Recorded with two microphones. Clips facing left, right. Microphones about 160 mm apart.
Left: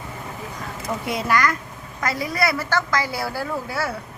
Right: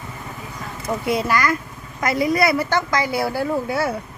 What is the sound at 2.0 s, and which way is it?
A woman's voice, 20° right (ahead or behind).